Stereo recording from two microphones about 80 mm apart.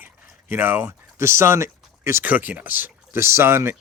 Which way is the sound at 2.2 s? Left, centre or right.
Centre.